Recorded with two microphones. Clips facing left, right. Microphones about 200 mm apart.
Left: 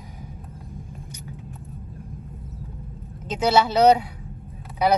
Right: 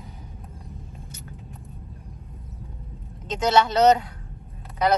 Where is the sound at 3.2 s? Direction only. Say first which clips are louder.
Left 1 dB; 5° left (ahead or behind).